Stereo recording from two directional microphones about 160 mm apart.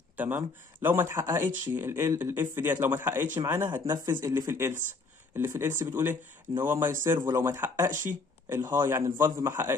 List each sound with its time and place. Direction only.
0.2 s speech: 10° right (ahead or behind)